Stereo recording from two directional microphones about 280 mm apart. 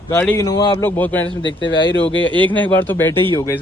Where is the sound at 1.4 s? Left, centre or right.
Left.